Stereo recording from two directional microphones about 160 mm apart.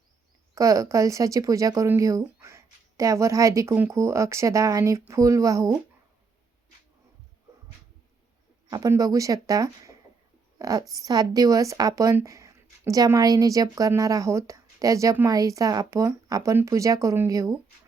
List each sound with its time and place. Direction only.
0.5 s speech: 20° right (ahead or behind)
8.7 s a woman's voice: 20° right (ahead or behind)